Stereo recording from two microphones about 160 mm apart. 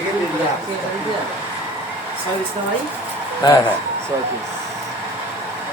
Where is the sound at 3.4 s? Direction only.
25° left (ahead or behind).